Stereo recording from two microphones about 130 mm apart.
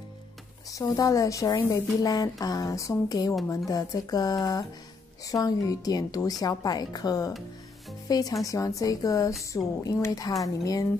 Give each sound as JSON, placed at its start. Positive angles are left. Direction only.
{"t": 0.9, "sound": "speech", "side_deg": 25}